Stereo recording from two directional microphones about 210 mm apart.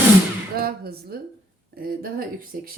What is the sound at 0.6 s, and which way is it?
A woman's voice, 45° right (ahead or behind).